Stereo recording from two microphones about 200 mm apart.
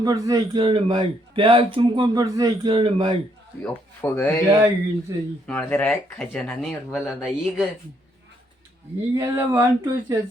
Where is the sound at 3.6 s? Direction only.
10° left (ahead or behind).